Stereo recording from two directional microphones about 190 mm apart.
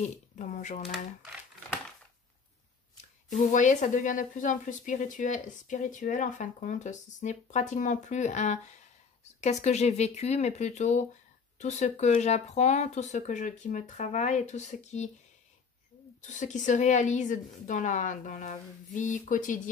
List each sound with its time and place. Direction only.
0.0 s speech: 40° left (ahead or behind)
3.3 s speech: 40° left (ahead or behind)
16.2 s speech: 40° left (ahead or behind)